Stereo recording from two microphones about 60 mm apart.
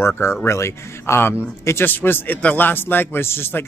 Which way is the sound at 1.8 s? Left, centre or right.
Left.